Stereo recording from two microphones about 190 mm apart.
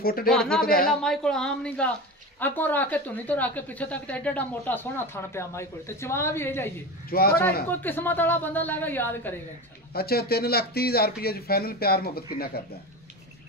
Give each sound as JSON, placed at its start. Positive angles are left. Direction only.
{"t": 0.0, "sound": "a man's voice", "side_deg": 50}
{"t": 0.3, "sound": "speech", "side_deg": 5}
{"t": 0.7, "sound": "a man's voice", "side_deg": 50}
{"t": 1.0, "sound": "a woman's voice", "side_deg": 5}
{"t": 7.1, "sound": "a man's voice", "side_deg": 50}
{"t": 7.6, "sound": "a woman's voice", "side_deg": 10}
{"t": 9.9, "sound": "speech", "side_deg": 55}